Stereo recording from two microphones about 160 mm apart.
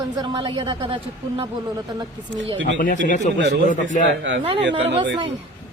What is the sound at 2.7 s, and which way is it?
A man's voice, 55° left (ahead or behind).